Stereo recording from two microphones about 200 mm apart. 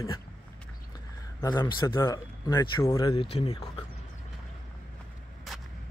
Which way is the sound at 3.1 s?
30° left (ahead or behind).